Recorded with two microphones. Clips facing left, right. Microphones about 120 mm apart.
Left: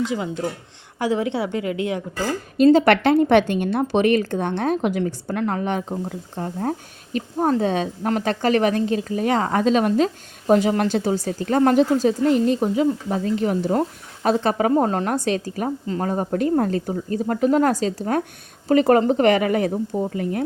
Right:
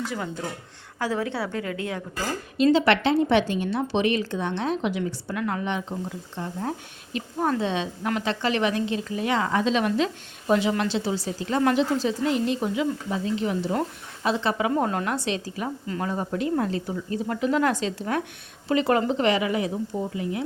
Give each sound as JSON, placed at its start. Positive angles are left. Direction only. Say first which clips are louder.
{"t": 0.9, "sound": "a woman's voice", "louder": "left 5 dB", "side_deg": 20}
{"t": 2.7, "sound": "a woman's voice", "louder": "left 5 dB", "side_deg": 50}